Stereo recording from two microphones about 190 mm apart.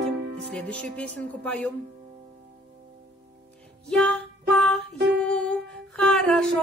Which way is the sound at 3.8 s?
5° left (ahead or behind).